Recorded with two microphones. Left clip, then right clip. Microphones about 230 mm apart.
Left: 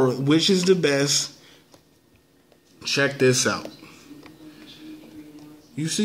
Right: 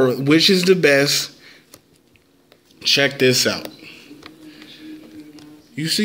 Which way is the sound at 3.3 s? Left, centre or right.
Right.